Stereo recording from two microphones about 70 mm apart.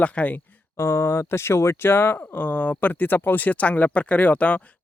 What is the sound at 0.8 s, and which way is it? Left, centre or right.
Speech, left.